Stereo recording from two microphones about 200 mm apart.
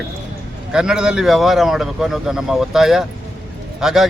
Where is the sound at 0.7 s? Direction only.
5° right (ahead or behind).